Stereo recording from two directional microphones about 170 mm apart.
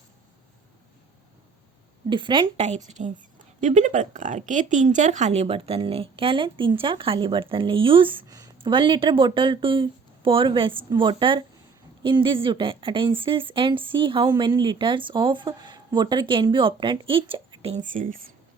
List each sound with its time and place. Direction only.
2.0 s a woman's voice: 30° right (ahead or behind)
2.6 s a woman's voice: 45° right (ahead or behind)